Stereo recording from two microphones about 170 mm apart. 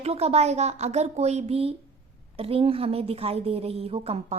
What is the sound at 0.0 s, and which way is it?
A woman's voice, 35° right (ahead or behind).